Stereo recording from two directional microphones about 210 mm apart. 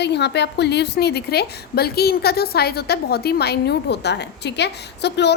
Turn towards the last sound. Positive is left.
turn(degrees=55)  # may be behind; listen again after turning